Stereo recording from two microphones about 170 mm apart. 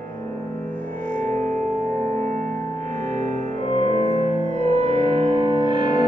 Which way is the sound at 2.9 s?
45° right (ahead or behind).